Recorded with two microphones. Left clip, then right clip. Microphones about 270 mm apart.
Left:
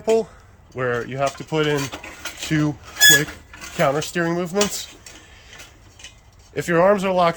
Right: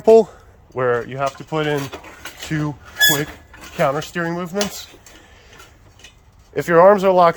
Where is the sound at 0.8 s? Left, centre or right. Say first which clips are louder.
Right 3 dB; centre.